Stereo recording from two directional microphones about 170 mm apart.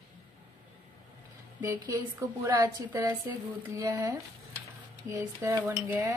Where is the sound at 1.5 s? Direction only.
20° right (ahead or behind).